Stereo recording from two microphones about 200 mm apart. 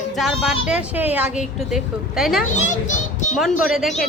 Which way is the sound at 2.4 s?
35° left (ahead or behind).